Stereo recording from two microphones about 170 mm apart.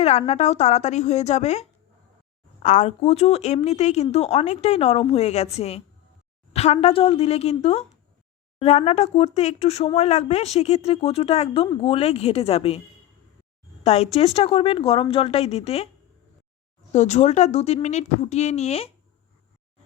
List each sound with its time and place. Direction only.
0.0 s a woman's voice: 40° left (ahead or behind)
13.8 s a woman's voice: 35° left (ahead or behind)
16.9 s a woman's voice: 45° left (ahead or behind)